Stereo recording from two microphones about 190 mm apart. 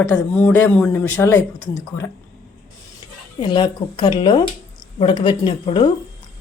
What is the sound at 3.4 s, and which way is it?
Speech, 25° left (ahead or behind).